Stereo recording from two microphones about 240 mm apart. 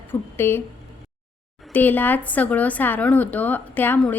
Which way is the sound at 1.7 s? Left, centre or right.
Centre.